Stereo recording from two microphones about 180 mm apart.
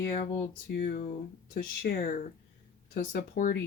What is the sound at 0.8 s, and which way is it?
Speech, 50° left (ahead or behind).